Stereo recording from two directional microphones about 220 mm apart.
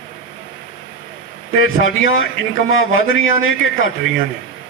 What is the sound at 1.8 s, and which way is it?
A man's voice, 60° left (ahead or behind).